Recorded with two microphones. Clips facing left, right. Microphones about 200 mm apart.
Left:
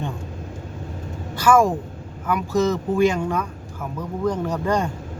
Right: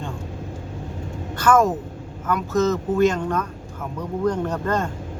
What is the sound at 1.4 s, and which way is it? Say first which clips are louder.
Speech: left 1 dB; 10° left (ahead or behind).